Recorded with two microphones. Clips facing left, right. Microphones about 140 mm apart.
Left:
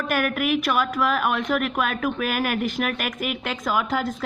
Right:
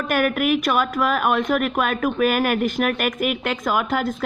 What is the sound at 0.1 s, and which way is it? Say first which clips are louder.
Speech: right 4 dB; 50° right (ahead or behind).